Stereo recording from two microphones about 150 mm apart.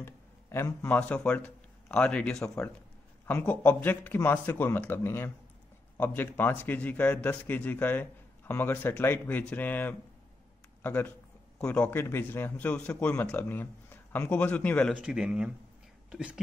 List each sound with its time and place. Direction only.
0.0 s a man's voice: 15° left (ahead or behind)
15.0 s speech: 5° right (ahead or behind)